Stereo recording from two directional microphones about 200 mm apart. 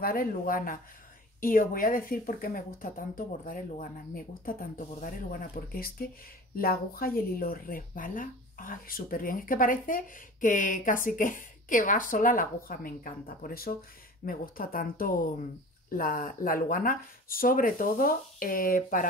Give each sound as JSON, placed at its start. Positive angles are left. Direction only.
{"t": 0.0, "sound": "speech", "side_deg": 45}